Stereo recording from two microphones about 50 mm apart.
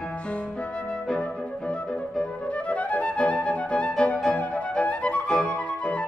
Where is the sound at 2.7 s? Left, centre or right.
Left.